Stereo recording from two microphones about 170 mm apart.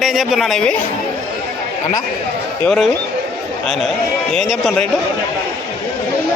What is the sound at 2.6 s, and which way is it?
Speech, 5° left (ahead or behind).